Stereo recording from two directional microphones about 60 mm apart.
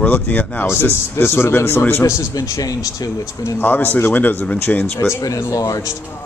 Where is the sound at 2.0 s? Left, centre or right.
Left.